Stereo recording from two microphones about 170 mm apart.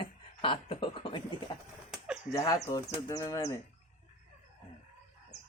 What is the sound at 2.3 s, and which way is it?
Speech, 20° left (ahead or behind).